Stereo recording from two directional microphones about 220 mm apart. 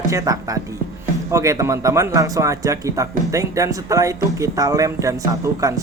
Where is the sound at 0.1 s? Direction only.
15° right (ahead or behind).